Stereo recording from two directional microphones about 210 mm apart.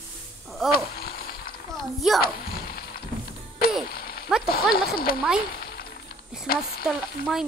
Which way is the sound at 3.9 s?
45° left (ahead or behind).